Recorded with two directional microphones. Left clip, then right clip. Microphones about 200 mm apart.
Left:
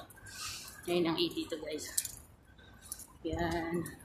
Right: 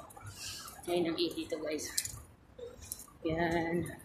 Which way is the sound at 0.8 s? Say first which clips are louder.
Left 1 dB; 10° left (ahead or behind).